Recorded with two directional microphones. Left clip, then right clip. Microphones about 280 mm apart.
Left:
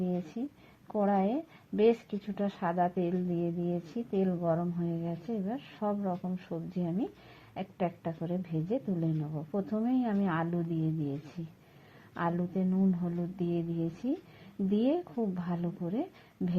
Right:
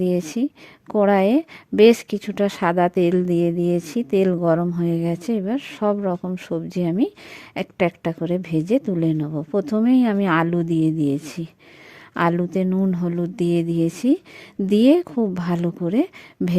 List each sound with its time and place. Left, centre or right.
0.0 s a woman's voice: right
12.1 s a woman's voice: right